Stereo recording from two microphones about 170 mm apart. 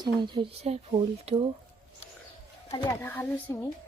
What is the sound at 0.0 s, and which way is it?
Speech, 25° right (ahead or behind).